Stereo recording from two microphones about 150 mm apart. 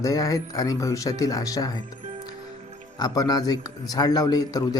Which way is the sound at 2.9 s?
25° left (ahead or behind).